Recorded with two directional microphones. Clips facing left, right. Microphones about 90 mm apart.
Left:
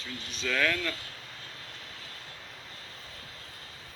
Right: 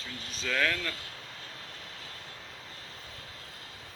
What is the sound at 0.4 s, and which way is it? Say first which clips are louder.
Speech: left 1 dB; 20° right (ahead or behind).